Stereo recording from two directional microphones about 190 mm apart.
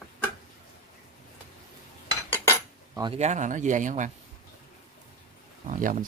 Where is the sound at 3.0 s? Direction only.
30° right (ahead or behind).